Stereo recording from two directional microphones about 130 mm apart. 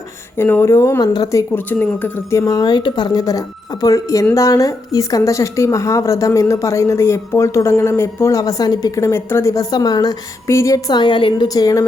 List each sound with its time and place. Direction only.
0.3 s a woman's voice: 15° left (ahead or behind)